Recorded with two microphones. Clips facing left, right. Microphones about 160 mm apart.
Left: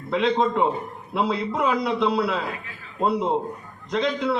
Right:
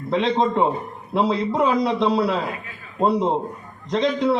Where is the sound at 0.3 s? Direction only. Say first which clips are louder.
Right 2 dB; 35° right (ahead or behind).